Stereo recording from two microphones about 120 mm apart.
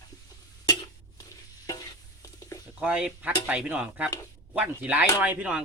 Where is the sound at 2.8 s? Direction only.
10° right (ahead or behind).